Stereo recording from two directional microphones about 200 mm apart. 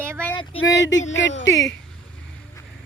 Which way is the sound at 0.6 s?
65° left (ahead or behind).